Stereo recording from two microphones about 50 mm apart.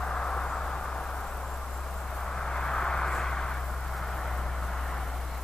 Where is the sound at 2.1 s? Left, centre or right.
Centre.